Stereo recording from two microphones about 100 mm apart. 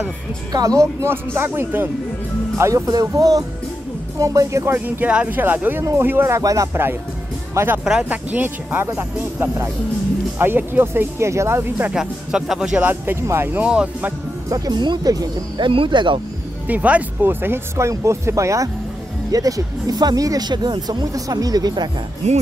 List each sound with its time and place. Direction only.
0.5 s speech: 40° right (ahead or behind)
1.0 s speech: 25° right (ahead or behind)
2.5 s speech: 30° right (ahead or behind)
4.7 s speech: 15° right (ahead or behind)
7.8 s speech: 10° right (ahead or behind); by 11.9 s 25° right (ahead or behind)
11.9 s speech: 5° right (ahead or behind)
12.8 s speech: 20° right (ahead or behind)
13.7 s speech: 10° right (ahead or behind)
14.5 s speech: 45° right (ahead or behind)
15.7 s speech: 55° right (ahead or behind)
16.6 s speech: 15° right (ahead or behind); by 21.8 s 40° right (ahead or behind)
22.2 s speech: 90° right